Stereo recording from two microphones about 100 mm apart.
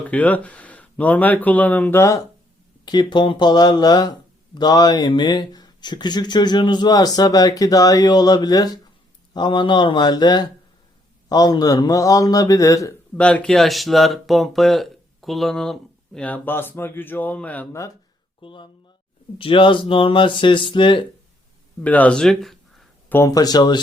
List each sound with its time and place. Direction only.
0.1 s speech: 15° left (ahead or behind)
2.8 s a man's voice: 45° left (ahead or behind)
13.1 s speech: 10° left (ahead or behind)
16.2 s speech: 20° left (ahead or behind)
17.7 s a man's voice: 30° left (ahead or behind)
18.3 s speech: 55° left (ahead or behind)
21.8 s speech: 15° left (ahead or behind)
23.0 s speech: 25° left (ahead or behind)
23.3 s a man's voice: 40° left (ahead or behind)